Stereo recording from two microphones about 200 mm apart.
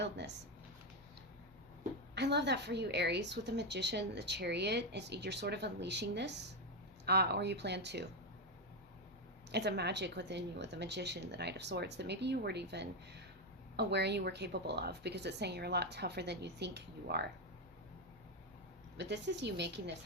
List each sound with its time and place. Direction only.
0.0 s speech: 60° right (ahead or behind)
2.1 s a woman's voice: 55° right (ahead or behind)
9.5 s a woman's voice: 55° right (ahead or behind)
18.9 s a woman's voice: 60° right (ahead or behind)